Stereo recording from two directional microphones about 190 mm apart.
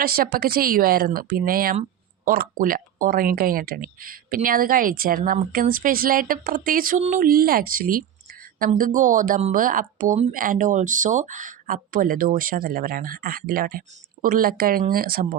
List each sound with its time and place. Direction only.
0.0 s speech: 50° right (ahead or behind)